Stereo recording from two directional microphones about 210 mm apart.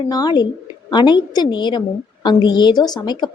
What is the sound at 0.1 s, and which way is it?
A woman's voice, 20° left (ahead or behind).